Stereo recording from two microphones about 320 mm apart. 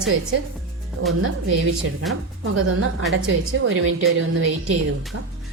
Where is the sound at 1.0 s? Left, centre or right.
Right.